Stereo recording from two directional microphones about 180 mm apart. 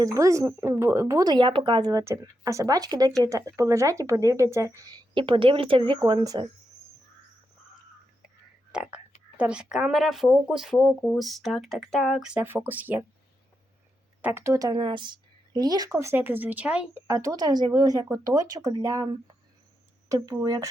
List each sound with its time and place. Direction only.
0.0 s speech: 15° right (ahead or behind)
8.7 s speech: 5° right (ahead or behind)
14.2 s speech: 10° right (ahead or behind)
17.1 s speech: 20° right (ahead or behind)
20.1 s speech: 20° right (ahead or behind)